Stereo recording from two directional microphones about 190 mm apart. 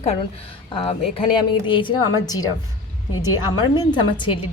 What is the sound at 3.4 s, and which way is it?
Speech, 20° left (ahead or behind).